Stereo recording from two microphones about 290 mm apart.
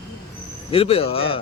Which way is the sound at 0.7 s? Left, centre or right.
Centre.